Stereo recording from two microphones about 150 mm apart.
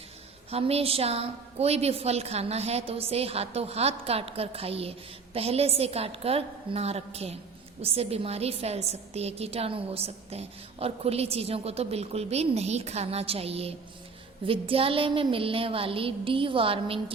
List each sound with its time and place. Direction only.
0.5 s a woman's voice: 40° right (ahead or behind)